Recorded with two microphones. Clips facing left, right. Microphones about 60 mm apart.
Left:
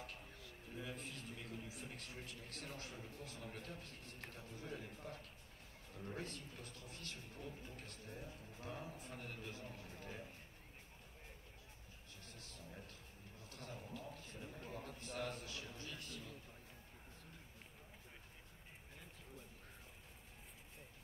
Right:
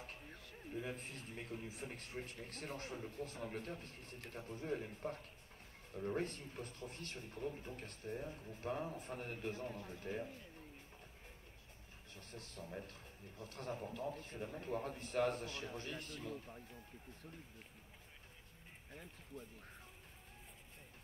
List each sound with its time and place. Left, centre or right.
0.0 s a man's voice: right
12.1 s a man's voice: right